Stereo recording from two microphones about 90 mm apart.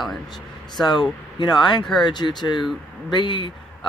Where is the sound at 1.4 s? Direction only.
55° left (ahead or behind).